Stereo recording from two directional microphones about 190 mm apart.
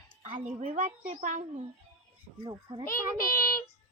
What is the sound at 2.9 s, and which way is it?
Speech, 45° left (ahead or behind).